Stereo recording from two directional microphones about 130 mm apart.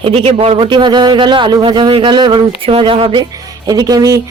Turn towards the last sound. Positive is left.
turn(degrees=-30)  # may be behind; listen again after turning